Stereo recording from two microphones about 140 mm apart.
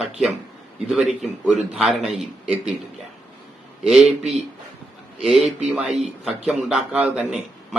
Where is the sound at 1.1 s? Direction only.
Centre (ahead or behind).